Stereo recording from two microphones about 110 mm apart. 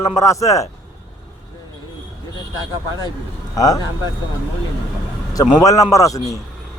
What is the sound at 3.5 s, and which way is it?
Speech, 35° left (ahead or behind).